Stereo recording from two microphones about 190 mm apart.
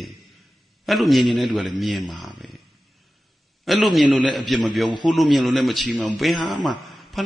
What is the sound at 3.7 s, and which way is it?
A man's voice, centre (ahead or behind).